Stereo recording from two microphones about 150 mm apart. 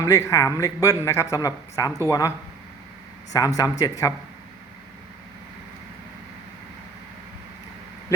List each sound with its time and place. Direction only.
0.0 s a woman's voice: 20° left (ahead or behind)
3.3 s a woman's voice: 25° left (ahead or behind)